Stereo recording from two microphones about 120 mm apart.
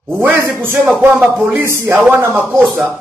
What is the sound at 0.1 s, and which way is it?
A man's voice, 15° right (ahead or behind).